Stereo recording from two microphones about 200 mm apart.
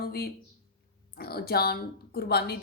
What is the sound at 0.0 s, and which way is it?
Speech, 50° left (ahead or behind).